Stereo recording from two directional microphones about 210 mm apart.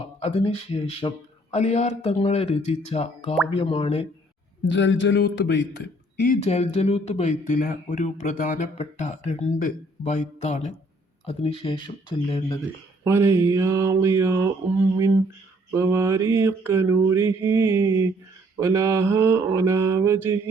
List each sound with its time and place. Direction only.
0.2 s a man's voice: 30° left (ahead or behind)
4.7 s a man's voice: 60° left (ahead or behind); by 12.5 s 20° left (ahead or behind)
13.1 s mantra: 15° right (ahead or behind)
15.7 s mantra: 10° right (ahead or behind)